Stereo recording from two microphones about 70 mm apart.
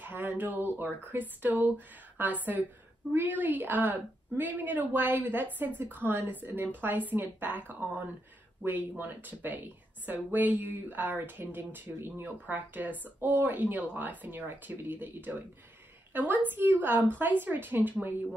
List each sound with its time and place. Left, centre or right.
0.0 s a woman's voice: right